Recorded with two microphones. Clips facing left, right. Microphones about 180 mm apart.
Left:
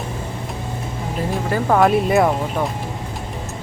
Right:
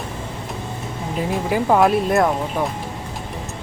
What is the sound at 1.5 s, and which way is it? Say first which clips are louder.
Speech: even; 10° right (ahead or behind).